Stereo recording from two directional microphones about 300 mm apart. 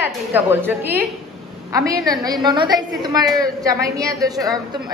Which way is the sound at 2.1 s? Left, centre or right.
Centre.